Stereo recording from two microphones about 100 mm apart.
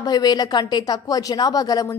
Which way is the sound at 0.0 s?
40° left (ahead or behind).